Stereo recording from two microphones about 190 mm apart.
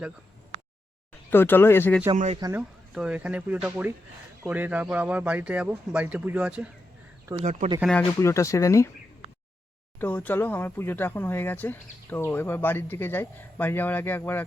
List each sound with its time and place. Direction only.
1.3 s speech: 10° left (ahead or behind)
2.1 s speech: 40° right (ahead or behind)
2.4 s speech: 15° right (ahead or behind)
7.8 s speech: 5° left (ahead or behind)
8.2 s speech: 15° left (ahead or behind)
10.0 s speech: 10° left (ahead or behind)